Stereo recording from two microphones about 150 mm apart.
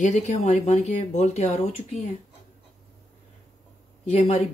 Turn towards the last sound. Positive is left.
turn(degrees=45)  # may be behind; listen again after turning